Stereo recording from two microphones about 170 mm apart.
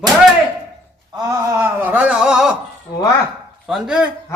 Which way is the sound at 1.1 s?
20° right (ahead or behind).